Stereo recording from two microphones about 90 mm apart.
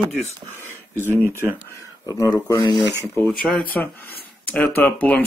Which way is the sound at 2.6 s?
55° left (ahead or behind).